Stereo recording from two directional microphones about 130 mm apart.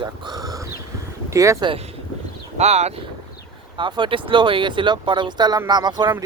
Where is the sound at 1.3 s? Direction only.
25° right (ahead or behind).